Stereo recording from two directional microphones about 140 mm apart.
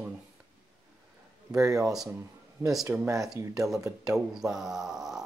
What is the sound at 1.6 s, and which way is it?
Speech, 25° right (ahead or behind).